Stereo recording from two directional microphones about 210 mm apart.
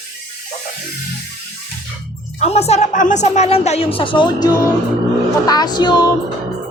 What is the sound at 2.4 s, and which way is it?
Speech, 30° left (ahead or behind).